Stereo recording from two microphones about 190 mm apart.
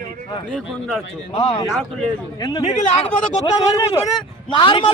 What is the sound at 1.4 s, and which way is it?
Speech, 30° left (ahead or behind).